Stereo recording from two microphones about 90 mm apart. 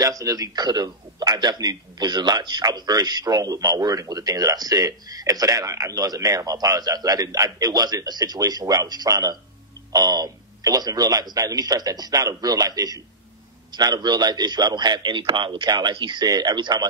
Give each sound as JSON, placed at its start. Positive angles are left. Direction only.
{"t": 0.0, "sound": "a man's voice", "side_deg": -45}